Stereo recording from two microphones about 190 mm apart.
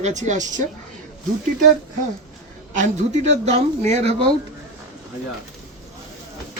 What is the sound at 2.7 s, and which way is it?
Speech, 40° right (ahead or behind).